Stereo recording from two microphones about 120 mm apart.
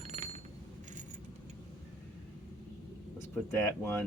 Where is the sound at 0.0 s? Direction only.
65° right (ahead or behind).